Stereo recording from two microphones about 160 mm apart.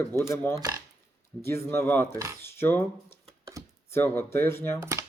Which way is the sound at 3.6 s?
20° right (ahead or behind).